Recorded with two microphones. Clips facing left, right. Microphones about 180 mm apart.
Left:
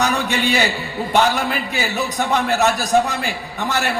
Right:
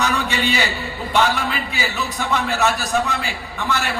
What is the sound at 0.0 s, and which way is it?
A man's voice, 45° left (ahead or behind).